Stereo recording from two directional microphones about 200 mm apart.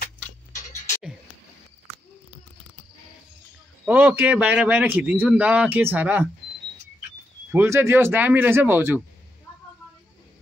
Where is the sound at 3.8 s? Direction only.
5° right (ahead or behind).